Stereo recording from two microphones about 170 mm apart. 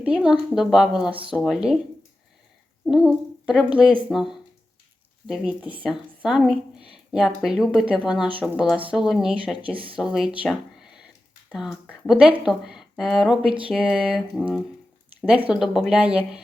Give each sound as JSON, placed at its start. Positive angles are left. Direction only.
{"t": 0.0, "sound": "speech", "side_deg": -5}
{"t": 2.8, "sound": "speech", "side_deg": 0}
{"t": 11.4, "sound": "speech", "side_deg": 0}